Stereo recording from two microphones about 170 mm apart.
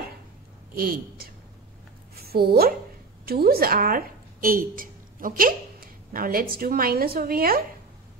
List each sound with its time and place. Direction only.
0.7 s a woman's voice: 60° right (ahead or behind)